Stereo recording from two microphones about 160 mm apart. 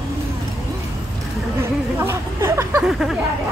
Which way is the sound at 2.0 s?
15° right (ahead or behind).